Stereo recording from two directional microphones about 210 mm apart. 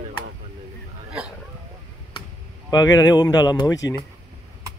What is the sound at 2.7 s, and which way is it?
Speech, 15° left (ahead or behind).